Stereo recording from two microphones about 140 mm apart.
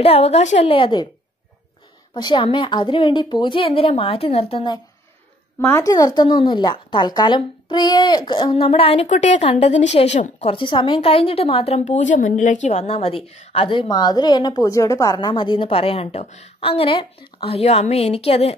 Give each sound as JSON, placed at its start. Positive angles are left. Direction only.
{"t": 0.0, "sound": "a woman's voice", "side_deg": 50}
{"t": 2.1, "sound": "a woman's voice", "side_deg": 35}
{"t": 5.6, "sound": "a woman's voice", "side_deg": 20}
{"t": 13.7, "sound": "a woman's voice", "side_deg": 35}